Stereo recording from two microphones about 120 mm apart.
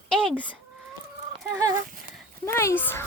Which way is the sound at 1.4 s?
25° right (ahead or behind).